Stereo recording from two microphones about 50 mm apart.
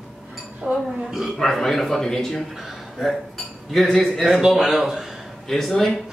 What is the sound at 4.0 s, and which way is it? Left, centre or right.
A man's voice, centre.